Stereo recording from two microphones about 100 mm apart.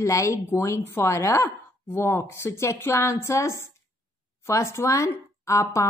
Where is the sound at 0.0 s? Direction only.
30° left (ahead or behind).